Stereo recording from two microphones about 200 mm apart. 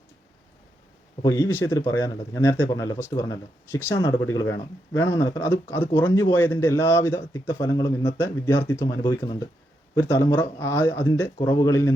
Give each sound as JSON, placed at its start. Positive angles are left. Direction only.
{"t": 1.2, "sound": "speech", "side_deg": 15}